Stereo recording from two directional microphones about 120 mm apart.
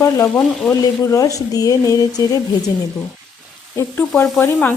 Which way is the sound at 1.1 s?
30° left (ahead or behind).